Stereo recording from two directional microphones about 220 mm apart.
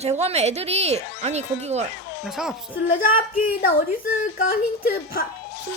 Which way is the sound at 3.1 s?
40° left (ahead or behind).